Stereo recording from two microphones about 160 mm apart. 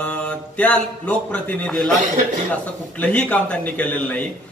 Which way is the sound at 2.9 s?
10° left (ahead or behind).